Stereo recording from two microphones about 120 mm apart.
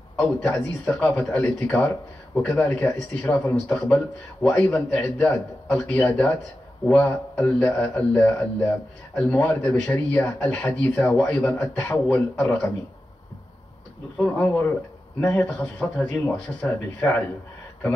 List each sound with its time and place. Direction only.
0.4 s a man's voice: 15° left (ahead or behind)
14.1 s a man's voice: 10° left (ahead or behind)